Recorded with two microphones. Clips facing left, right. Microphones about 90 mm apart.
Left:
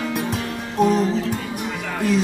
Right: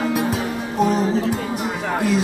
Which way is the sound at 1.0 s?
40° right (ahead or behind).